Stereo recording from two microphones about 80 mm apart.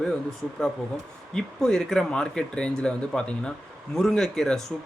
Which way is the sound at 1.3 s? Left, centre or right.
Centre.